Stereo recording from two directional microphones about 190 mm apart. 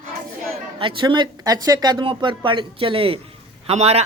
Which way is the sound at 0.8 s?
25° right (ahead or behind).